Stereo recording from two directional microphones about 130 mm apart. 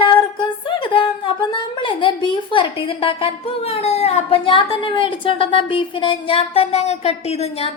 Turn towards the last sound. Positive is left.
turn(degrees=55)  # may be behind; listen again after turning